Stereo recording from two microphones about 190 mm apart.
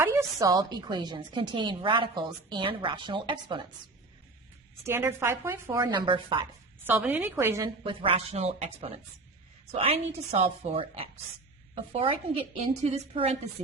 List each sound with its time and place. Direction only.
0.0 s a woman's voice: 15° right (ahead or behind)
4.8 s a woman's voice: 15° right (ahead or behind)
6.8 s a woman's voice: 10° right (ahead or behind)
7.9 s a woman's voice: 30° right (ahead or behind)